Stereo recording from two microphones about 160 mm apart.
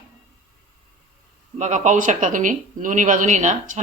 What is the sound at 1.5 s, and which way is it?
Speech, 50° right (ahead or behind).